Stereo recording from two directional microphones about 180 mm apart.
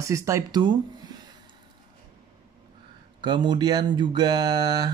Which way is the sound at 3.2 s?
25° right (ahead or behind).